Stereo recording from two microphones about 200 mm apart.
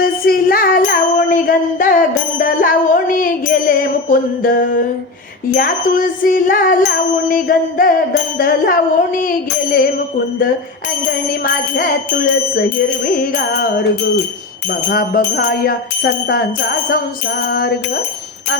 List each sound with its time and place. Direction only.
0.0 s a sound: 50° left (ahead or behind)
5.5 s music: 45° left (ahead or behind)
11.3 s music: 45° left (ahead or behind)
14.8 s music: 50° left (ahead or behind)